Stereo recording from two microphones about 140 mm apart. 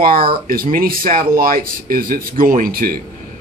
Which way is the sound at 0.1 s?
90° right.